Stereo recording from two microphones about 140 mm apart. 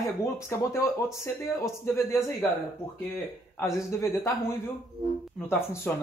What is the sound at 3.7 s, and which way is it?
Speech, 20° left (ahead or behind).